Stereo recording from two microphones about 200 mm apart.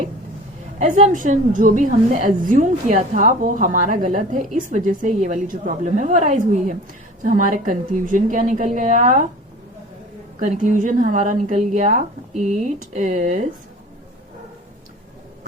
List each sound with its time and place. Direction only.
0.8 s a woman's voice: 35° right (ahead or behind)
10.4 s a woman's voice: 40° right (ahead or behind)